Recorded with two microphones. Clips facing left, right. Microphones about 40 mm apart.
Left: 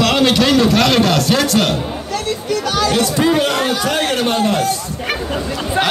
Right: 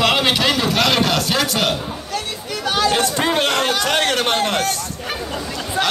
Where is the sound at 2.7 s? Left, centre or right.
Right.